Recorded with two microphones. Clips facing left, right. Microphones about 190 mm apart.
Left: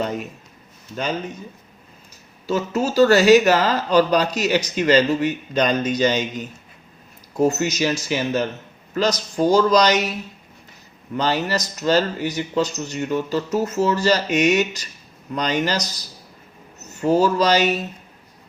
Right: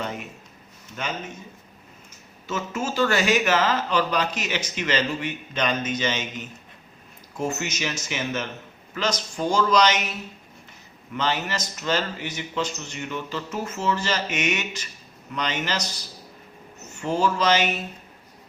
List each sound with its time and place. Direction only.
0.9 s speech: 35° left (ahead or behind)
2.5 s speech: 35° left (ahead or behind)
11.1 s speech: 35° left (ahead or behind)
16.9 s speech: 40° left (ahead or behind)